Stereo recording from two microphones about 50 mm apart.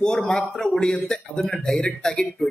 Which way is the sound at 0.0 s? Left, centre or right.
Centre.